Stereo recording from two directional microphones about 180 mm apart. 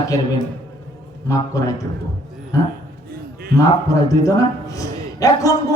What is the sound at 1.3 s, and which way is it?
A man's voice, 20° left (ahead or behind).